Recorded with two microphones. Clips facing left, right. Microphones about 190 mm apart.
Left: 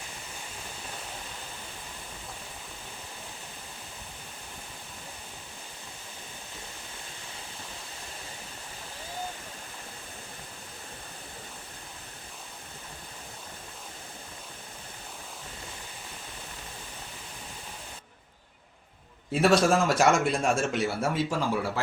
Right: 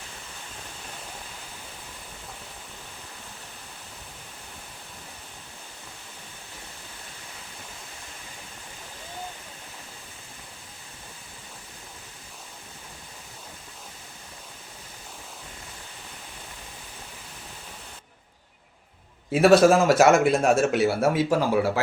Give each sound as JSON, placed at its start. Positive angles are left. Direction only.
{"t": 19.3, "sound": "a man's voice", "side_deg": -5}
{"t": 21.2, "sound": "speech", "side_deg": -65}